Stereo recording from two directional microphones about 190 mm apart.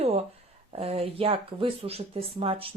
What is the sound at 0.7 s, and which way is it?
Speech, 30° right (ahead or behind).